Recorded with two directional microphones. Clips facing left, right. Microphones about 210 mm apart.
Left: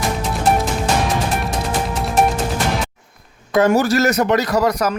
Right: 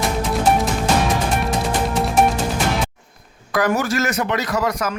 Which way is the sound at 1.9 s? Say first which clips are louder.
Even; centre (ahead or behind).